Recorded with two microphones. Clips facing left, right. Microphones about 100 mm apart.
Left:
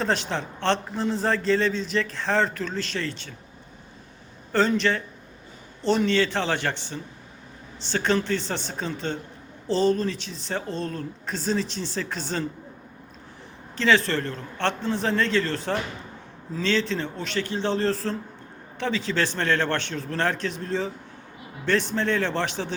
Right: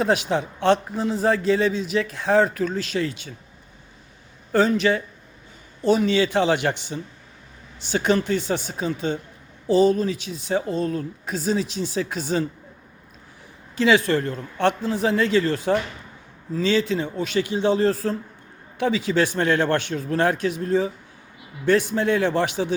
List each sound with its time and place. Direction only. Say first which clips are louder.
0.0 s a man's voice: right 5 dB; 10° right (ahead or behind)
4.5 s a man's voice: right 3 dB; 5° right (ahead or behind)
13.7 s a man's voice: right 3 dB; 10° right (ahead or behind)